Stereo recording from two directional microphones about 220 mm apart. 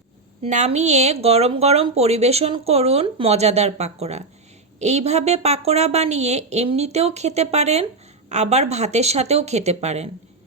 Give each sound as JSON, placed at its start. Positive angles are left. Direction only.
{"t": 0.4, "sound": "speech", "side_deg": -30}